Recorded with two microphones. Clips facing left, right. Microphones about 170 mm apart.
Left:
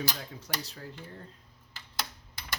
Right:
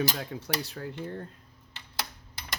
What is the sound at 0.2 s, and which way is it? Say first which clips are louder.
Speech: right 6 dB; 60° right (ahead or behind).